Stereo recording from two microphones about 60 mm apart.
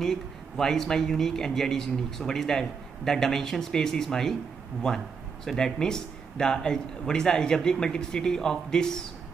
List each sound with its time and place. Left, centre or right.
0.0 s speech: centre